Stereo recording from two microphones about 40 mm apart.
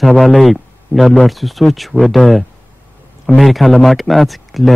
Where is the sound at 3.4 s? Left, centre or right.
Centre.